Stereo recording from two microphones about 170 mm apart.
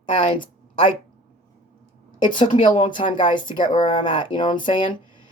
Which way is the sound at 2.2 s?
30° left (ahead or behind).